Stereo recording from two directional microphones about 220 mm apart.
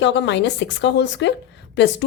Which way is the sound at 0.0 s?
55° left (ahead or behind).